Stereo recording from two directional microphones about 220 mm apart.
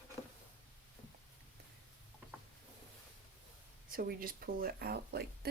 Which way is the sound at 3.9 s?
40° right (ahead or behind).